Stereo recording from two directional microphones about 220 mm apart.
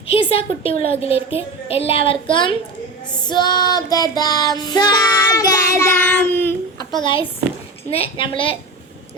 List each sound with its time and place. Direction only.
0.1 s a woman's voice: 25° left (ahead or behind)
3.2 s child singing: 20° left (ahead or behind)
7.9 s a woman's voice: 25° left (ahead or behind)